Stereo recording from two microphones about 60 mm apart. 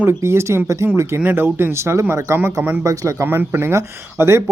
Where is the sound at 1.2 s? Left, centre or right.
Right.